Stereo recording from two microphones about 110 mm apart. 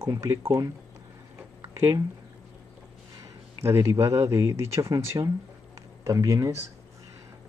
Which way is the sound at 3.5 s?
25° right (ahead or behind).